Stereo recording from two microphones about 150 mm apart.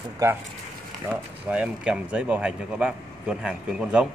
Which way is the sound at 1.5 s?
10° right (ahead or behind).